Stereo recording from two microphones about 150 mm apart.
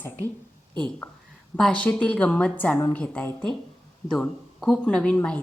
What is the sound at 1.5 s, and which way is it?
A woman's voice, 5° left (ahead or behind).